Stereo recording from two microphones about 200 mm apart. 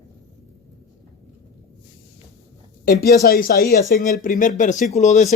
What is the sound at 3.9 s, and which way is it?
Speech, 40° left (ahead or behind).